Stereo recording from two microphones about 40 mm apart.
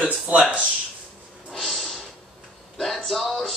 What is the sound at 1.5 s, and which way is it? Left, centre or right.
Snort, centre.